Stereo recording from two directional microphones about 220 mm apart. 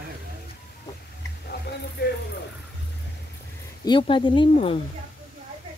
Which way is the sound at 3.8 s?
20° left (ahead or behind).